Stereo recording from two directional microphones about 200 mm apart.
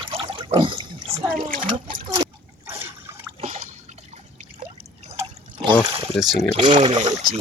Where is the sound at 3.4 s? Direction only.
35° right (ahead or behind).